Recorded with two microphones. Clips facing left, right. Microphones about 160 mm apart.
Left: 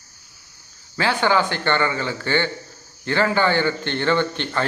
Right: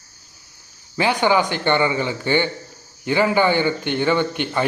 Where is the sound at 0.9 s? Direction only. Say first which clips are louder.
Right 2 dB; 15° right (ahead or behind).